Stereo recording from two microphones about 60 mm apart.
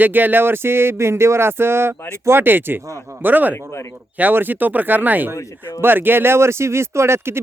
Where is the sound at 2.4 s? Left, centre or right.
Right.